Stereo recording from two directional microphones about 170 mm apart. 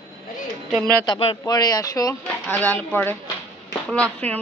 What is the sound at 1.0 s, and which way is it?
Speech, 30° left (ahead or behind).